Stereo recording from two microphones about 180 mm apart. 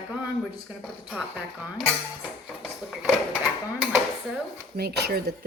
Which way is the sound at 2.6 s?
5° right (ahead or behind).